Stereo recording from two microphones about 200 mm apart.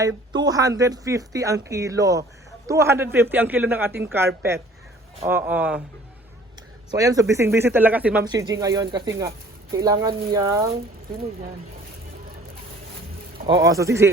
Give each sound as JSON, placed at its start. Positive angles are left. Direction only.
{"t": 0.3, "sound": "speech", "side_deg": -20}
{"t": 6.9, "sound": "speech", "side_deg": -15}
{"t": 13.5, "sound": "speech", "side_deg": -15}